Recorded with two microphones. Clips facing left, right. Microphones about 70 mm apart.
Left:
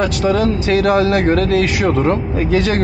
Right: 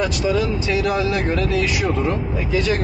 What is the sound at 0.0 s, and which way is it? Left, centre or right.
Speech, left.